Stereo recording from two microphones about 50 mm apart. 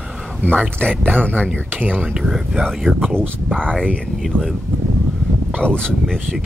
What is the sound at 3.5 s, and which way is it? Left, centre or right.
Speech, centre.